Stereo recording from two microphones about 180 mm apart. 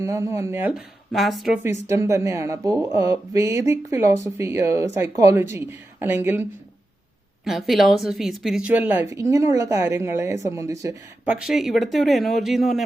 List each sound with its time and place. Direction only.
0.0 s speech: 15° right (ahead or behind)
1.9 s speech: 15° right (ahead or behind)
7.4 s a woman's voice: centre (ahead or behind); by 10.9 s 15° right (ahead or behind)
11.3 s a woman's voice: 5° right (ahead or behind)